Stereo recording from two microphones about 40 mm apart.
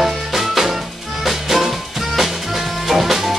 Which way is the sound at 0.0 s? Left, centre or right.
Centre.